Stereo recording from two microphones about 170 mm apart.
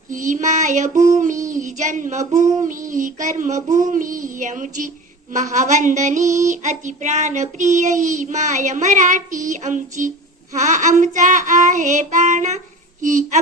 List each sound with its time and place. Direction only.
0.1 s child singing: 50° right (ahead or behind)